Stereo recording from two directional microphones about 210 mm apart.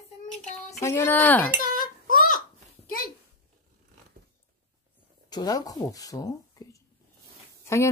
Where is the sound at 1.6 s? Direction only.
40° left (ahead or behind).